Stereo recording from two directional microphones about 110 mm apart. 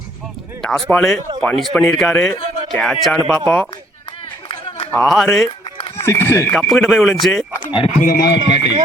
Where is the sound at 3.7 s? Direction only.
50° left (ahead or behind).